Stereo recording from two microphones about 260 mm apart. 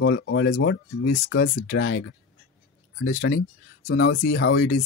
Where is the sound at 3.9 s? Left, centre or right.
Left.